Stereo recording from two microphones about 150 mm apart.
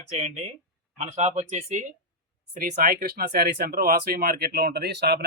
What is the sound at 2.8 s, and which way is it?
Speech, 80° right.